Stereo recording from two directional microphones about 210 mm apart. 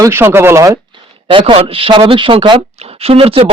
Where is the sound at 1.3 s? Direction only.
25° right (ahead or behind).